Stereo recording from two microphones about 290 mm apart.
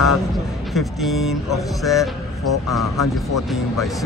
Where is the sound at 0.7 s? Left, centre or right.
Centre.